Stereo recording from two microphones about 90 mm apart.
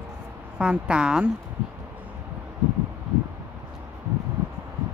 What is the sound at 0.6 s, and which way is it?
Speech, 10° right (ahead or behind).